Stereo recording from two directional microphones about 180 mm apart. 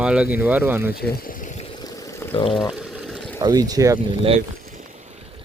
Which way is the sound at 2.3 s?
30° left (ahead or behind).